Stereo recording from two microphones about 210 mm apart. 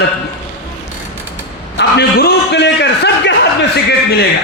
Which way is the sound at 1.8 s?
50° left (ahead or behind).